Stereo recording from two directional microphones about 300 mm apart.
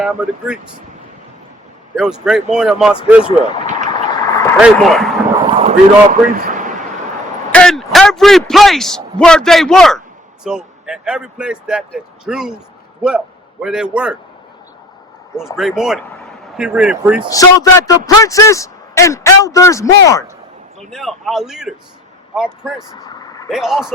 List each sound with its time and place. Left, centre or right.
0.0 s speech: centre
2.2 s speech: centre
3.2 s speech: centre
3.7 s a sound: right
4.1 s a sound: centre
4.6 s speech: centre
5.5 s a man's voice: right
7.5 s a man's voice: centre
15.5 s speech: centre
17.3 s speech: centre
22.9 s vehicle: centre
23.5 s speech: centre